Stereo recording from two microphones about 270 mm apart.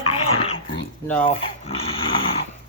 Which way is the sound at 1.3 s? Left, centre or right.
Left.